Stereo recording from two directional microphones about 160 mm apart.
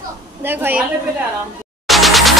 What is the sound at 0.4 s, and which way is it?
Speech, 15° right (ahead or behind).